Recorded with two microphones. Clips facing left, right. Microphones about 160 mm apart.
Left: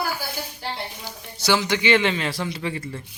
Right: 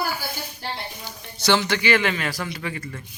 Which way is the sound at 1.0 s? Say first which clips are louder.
Right 2 dB; 10° left (ahead or behind).